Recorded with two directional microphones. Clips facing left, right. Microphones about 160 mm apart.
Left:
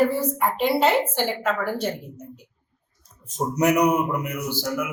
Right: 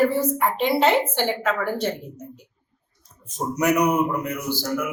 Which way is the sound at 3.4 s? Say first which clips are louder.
Left 2 dB; 30° left (ahead or behind).